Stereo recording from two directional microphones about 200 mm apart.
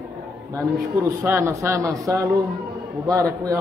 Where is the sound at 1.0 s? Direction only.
10° right (ahead or behind).